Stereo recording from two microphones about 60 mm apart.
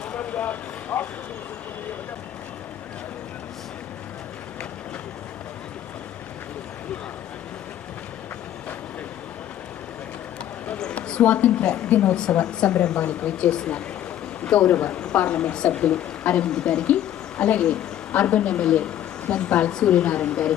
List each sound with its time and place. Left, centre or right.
0.1 s vehicle: left
10.8 s speech: centre